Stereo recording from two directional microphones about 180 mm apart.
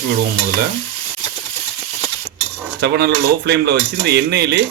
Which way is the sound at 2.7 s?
70° right (ahead or behind).